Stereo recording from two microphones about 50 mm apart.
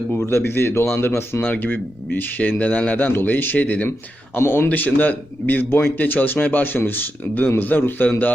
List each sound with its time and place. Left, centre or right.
0.2 s speech: left
1.5 s a man's voice: left
3.1 s a man's voice: left
4.4 s a man's voice: left